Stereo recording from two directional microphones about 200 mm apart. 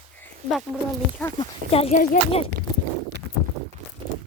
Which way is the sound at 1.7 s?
30° left (ahead or behind).